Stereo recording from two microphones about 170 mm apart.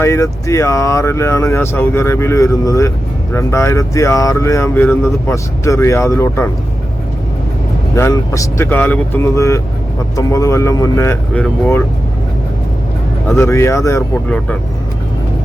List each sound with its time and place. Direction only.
0.0 s speech: 20° left (ahead or behind)
7.9 s speech: 15° left (ahead or behind)
13.3 s speech: 15° left (ahead or behind)